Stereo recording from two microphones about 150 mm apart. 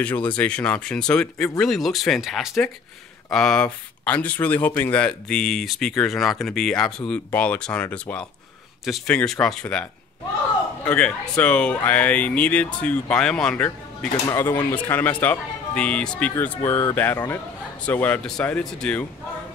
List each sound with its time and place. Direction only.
0.0 s speech: 10° left (ahead or behind)
13.7 s speech: 20° left (ahead or behind); by 19.0 s 5° left (ahead or behind)